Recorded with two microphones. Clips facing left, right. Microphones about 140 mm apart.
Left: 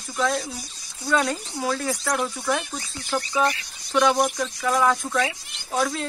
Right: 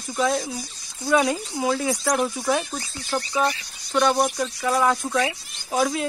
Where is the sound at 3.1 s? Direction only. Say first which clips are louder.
Even; centre (ahead or behind).